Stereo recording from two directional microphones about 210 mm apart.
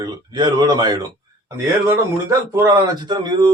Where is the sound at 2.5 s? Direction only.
15° right (ahead or behind).